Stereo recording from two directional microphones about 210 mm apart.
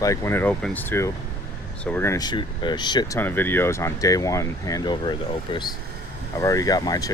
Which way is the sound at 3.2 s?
10° left (ahead or behind).